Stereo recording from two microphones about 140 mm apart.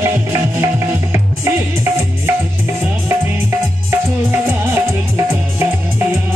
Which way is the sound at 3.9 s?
15° right (ahead or behind).